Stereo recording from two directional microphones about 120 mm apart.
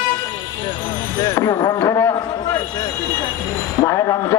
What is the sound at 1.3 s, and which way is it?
Speech, 25° left (ahead or behind).